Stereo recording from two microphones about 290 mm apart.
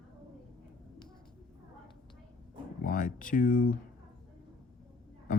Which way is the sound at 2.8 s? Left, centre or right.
Left.